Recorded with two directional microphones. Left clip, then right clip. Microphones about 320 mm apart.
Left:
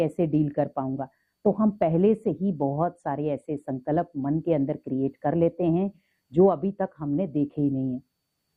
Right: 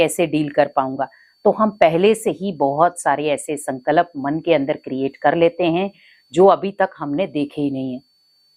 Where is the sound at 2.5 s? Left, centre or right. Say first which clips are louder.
Right 11 dB; centre.